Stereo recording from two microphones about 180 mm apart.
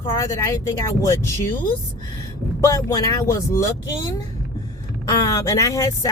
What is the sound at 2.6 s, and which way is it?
Speech, 20° left (ahead or behind).